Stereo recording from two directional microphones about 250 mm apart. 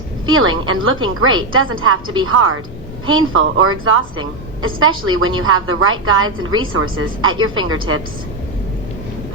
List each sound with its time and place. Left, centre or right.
0.3 s a woman's voice: right